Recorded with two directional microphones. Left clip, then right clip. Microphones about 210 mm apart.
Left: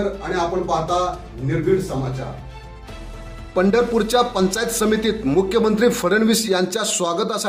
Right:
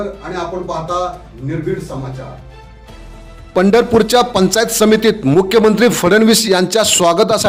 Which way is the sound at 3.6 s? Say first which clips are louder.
Right 7 dB; 40° right (ahead or behind).